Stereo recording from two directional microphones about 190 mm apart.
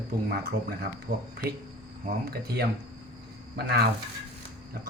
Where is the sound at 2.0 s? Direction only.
55° right (ahead or behind).